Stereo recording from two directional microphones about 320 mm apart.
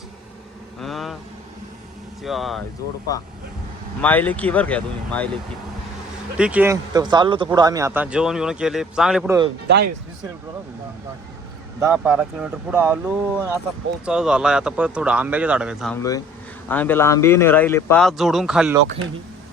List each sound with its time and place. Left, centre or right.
0.8 s vehicle: centre
2.2 s speech: centre
4.0 s speech: centre
6.3 s speech: centre
9.6 s speech: right
11.8 s speech: centre